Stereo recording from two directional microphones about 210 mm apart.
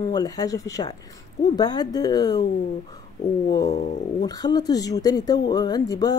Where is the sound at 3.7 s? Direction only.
35° left (ahead or behind).